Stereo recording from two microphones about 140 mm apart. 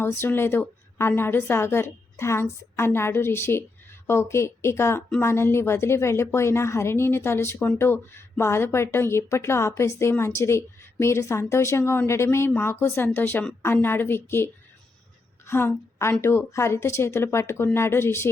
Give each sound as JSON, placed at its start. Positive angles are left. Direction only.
{"t": 0.0, "sound": "a woman's voice", "side_deg": 15}